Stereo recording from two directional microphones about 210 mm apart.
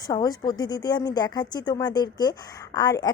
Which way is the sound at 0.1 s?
20° left (ahead or behind).